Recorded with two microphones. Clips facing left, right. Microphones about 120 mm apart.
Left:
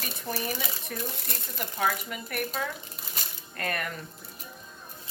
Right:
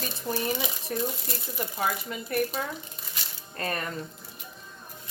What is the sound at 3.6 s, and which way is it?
Speech, 30° right (ahead or behind).